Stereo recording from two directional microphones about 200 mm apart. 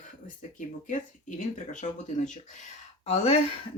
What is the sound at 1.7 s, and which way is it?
Speech, 40° left (ahead or behind).